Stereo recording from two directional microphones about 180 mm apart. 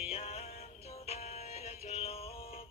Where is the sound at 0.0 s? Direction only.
35° left (ahead or behind).